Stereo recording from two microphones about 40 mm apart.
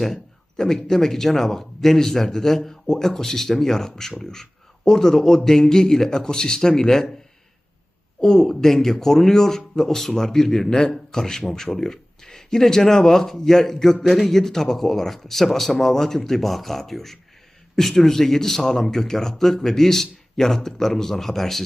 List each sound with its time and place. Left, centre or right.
0.5 s speech: centre
8.2 s speech: centre
10.7 s a man's voice: left